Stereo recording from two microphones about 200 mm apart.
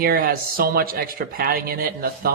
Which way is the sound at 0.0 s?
50° right (ahead or behind).